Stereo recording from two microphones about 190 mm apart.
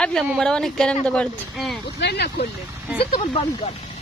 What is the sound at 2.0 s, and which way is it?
Speech, 60° left (ahead or behind).